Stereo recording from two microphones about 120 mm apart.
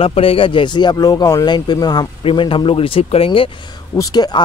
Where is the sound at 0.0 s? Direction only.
50° left (ahead or behind); by 2.0 s 35° left (ahead or behind).